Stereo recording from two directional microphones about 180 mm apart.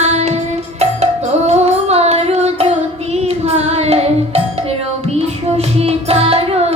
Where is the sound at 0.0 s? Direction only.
40° right (ahead or behind).